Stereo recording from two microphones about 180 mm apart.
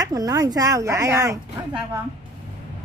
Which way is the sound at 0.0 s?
20° right (ahead or behind).